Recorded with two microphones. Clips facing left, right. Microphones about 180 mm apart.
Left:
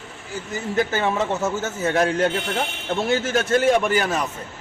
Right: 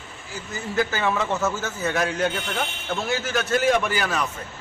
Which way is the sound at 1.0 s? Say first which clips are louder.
Left 1 dB; 25° left (ahead or behind).